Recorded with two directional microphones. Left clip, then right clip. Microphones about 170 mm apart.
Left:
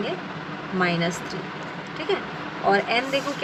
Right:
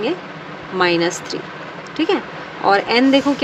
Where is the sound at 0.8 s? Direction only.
75° right (ahead or behind).